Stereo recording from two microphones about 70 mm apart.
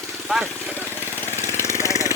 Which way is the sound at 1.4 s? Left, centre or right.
Left.